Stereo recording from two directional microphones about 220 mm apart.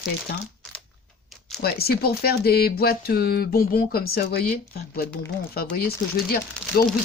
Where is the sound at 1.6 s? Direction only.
45° left (ahead or behind).